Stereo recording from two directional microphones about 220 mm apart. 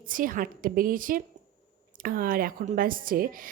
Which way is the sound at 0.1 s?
40° right (ahead or behind).